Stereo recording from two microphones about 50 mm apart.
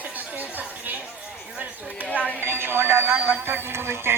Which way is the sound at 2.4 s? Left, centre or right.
Right.